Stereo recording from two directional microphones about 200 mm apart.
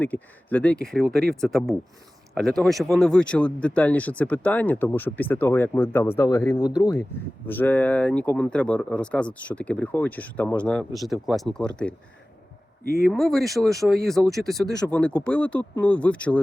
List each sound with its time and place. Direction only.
0.0 s speech: 10° left (ahead or behind)
6.6 s speech: 5° right (ahead or behind)
7.4 s speech: 10° left (ahead or behind)
13.1 s speech: centre (ahead or behind)